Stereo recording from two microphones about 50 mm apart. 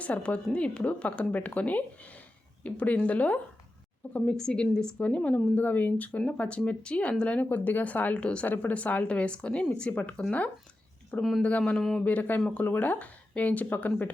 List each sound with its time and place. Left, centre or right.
0.0 s speech: left
4.4 s speech: centre; by 6.1 s left
6.1 s speech: left
8.4 s speech: left
11.2 s speech: centre
11.4 s speech: left